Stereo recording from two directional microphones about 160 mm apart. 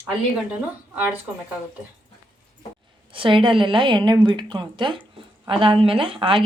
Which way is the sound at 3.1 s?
35° right (ahead or behind).